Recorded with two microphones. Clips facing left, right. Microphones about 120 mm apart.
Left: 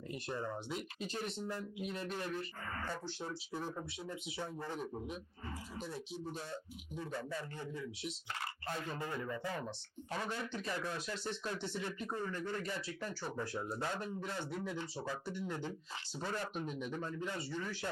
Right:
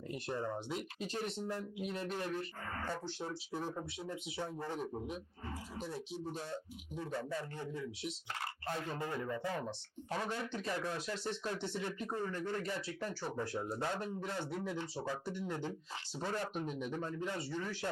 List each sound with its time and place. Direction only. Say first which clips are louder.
0.1 s speech: right 2 dB; 50° right (ahead or behind)